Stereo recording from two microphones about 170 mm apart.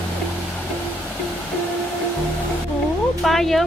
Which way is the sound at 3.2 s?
Centre (ahead or behind).